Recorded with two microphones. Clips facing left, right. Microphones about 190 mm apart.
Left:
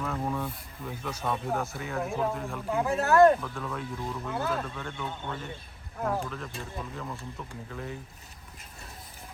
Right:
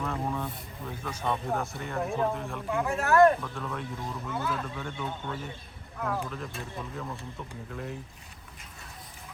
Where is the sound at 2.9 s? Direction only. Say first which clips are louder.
Left 1 dB; 35° left (ahead or behind).